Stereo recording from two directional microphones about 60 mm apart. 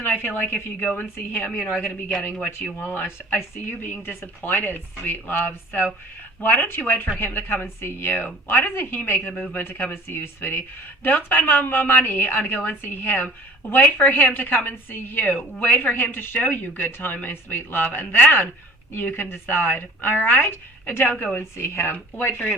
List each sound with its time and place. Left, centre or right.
0.0 s a woman's voice: left
2.9 s speech: left
21.3 s speech: left